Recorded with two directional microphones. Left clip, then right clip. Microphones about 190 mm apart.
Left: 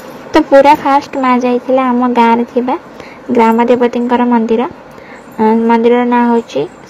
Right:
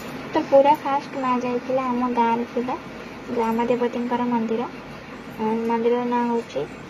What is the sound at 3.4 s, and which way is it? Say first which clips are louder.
A woman's voice: left 12 dB; 45° left (ahead or behind).